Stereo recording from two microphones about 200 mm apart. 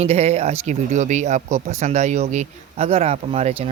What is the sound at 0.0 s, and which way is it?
Speech, 35° right (ahead or behind).